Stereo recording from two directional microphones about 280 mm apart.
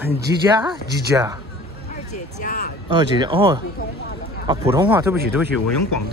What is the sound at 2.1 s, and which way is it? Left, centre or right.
Speech, left.